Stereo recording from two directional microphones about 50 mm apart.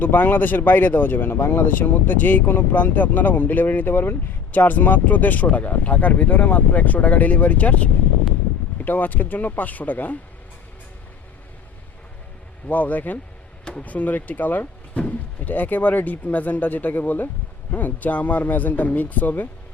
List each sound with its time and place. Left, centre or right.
0.0 s speech: left
1.4 s speech: left
1.6 s speech: left
8.8 s speech: left
12.6 s speech: left